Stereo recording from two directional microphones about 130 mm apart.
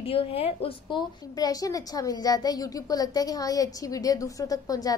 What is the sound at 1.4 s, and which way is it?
A woman's voice, 30° left (ahead or behind).